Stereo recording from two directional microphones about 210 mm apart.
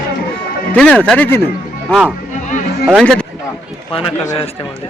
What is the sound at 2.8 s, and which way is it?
Speech, centre (ahead or behind).